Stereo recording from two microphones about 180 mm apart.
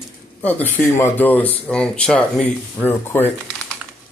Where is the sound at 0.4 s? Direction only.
10° left (ahead or behind).